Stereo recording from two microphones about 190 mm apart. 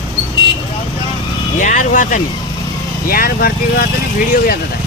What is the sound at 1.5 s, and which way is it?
Speech, 40° left (ahead or behind).